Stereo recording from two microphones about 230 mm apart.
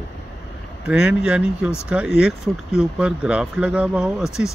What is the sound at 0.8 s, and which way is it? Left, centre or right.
Speech, centre.